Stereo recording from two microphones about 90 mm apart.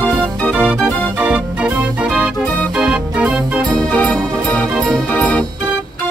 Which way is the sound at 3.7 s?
10° left (ahead or behind).